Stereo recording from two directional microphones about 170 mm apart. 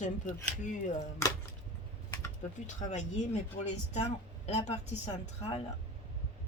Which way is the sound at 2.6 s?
45° left (ahead or behind).